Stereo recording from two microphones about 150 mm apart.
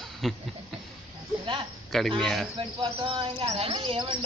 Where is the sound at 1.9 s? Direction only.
Centre (ahead or behind).